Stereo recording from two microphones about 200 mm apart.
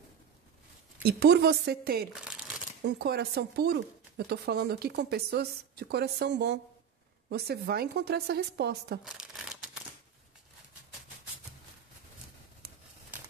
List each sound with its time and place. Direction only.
1.0 s speech: 50° right (ahead or behind)
2.1 s crumpling: 5° right (ahead or behind)
2.8 s speech: 55° right (ahead or behind)
9.0 s shuffling cards: 5° right (ahead or behind)